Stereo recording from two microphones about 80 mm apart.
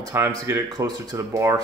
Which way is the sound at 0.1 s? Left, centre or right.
Right.